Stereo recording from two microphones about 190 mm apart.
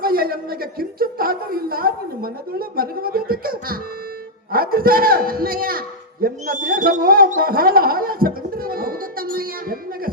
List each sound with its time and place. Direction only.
0.0 s a man's voice: 50° right (ahead or behind)